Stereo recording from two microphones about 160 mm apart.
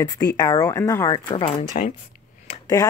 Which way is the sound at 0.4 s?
25° left (ahead or behind).